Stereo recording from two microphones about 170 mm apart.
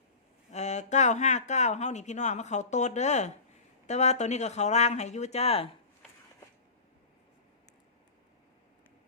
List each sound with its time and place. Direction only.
0.5 s speech: 40° left (ahead or behind)